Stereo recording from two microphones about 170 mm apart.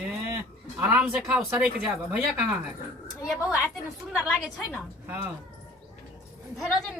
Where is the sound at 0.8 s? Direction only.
10° right (ahead or behind).